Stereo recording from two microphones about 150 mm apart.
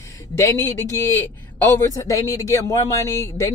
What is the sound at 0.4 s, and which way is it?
A man's voice, 15° left (ahead or behind).